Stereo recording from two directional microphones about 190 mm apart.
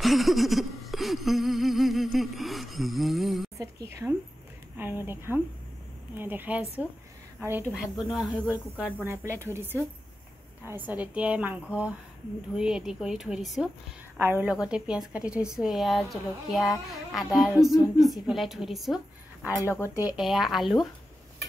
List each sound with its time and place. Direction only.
0.0 s a woman's voice: centre (ahead or behind)
3.5 s a woman's voice: 15° right (ahead or behind)
19.7 s speech: 15° left (ahead or behind)
20.2 s a woman's voice: centre (ahead or behind)